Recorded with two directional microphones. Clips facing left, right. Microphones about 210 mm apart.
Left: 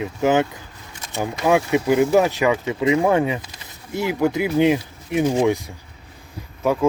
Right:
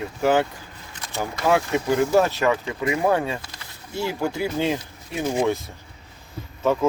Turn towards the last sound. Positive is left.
turn(degrees=10)  # may be behind; listen again after turning